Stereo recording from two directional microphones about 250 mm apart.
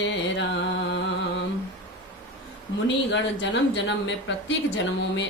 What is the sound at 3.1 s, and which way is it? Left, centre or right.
Speech, left.